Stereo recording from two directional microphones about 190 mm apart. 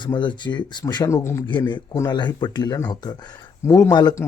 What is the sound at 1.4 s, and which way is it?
Speech, 25° left (ahead or behind).